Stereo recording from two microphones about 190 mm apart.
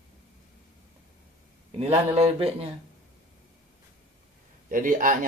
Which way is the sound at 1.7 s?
30° right (ahead or behind).